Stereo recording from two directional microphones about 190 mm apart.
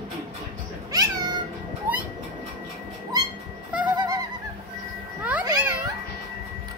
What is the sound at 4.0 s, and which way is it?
Goose, 20° right (ahead or behind).